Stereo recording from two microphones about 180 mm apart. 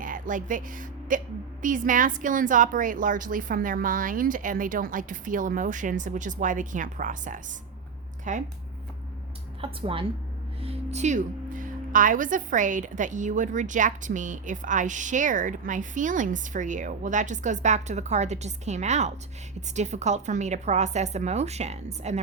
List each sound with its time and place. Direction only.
0.0 s a woman's voice: 50° right (ahead or behind)
9.6 s a woman's voice: 30° right (ahead or behind)